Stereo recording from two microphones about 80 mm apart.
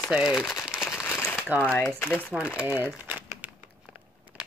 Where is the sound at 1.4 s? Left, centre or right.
Centre.